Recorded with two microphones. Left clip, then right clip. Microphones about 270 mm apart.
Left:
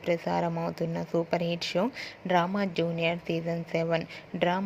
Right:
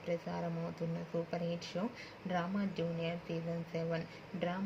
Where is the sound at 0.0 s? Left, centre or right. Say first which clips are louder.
Left 11 dB; left.